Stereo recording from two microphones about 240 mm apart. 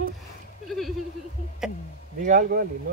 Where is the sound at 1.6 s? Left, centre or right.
Centre.